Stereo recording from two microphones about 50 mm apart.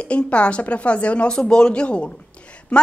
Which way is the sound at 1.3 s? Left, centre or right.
Centre.